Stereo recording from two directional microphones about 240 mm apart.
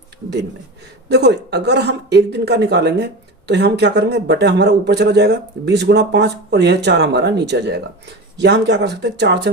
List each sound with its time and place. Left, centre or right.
1.0 s speech: right